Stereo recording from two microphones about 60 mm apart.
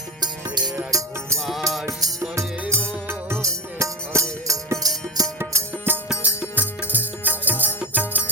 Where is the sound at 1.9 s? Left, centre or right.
Right.